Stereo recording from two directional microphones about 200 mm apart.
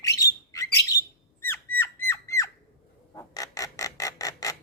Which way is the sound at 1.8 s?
10° left (ahead or behind).